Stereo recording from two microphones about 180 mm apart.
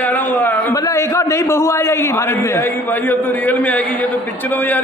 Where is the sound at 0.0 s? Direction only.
10° left (ahead or behind).